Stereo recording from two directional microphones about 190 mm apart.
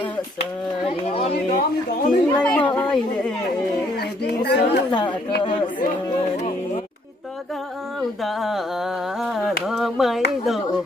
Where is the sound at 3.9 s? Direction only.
60° left (ahead or behind).